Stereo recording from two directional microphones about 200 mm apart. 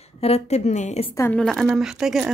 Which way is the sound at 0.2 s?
30° left (ahead or behind).